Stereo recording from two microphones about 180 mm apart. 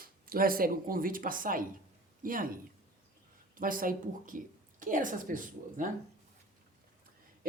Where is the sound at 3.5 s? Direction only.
50° right (ahead or behind).